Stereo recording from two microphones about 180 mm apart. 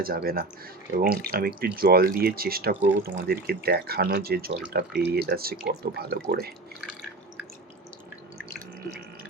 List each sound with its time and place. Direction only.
0.0 s speech: 55° right (ahead or behind)
2.8 s speech: 10° right (ahead or behind)
3.2 s speech: 60° right (ahead or behind)